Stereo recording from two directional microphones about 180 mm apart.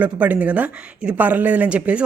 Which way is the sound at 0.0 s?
10° right (ahead or behind).